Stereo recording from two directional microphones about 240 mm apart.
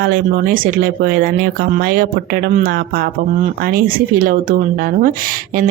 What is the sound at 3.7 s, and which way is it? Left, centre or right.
Speech, right.